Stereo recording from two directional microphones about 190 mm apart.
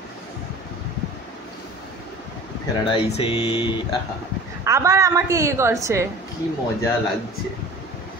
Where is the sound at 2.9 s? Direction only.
30° left (ahead or behind).